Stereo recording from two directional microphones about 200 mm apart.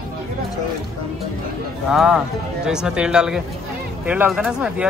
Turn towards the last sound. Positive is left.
turn(degrees=-5)  # may be behind; listen again after turning